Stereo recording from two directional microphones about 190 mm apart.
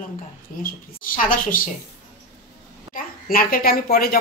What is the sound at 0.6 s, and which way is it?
A woman's voice, 45° left (ahead or behind).